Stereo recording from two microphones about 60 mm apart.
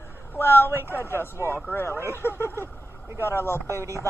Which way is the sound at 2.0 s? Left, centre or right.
Left.